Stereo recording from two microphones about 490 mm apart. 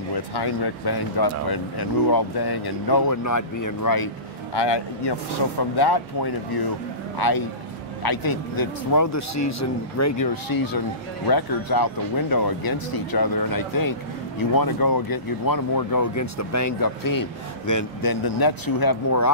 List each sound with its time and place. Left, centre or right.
0.1 s speech: left
4.6 s speech: left